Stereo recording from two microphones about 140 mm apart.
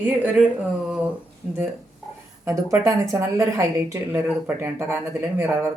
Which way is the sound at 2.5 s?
20° right (ahead or behind).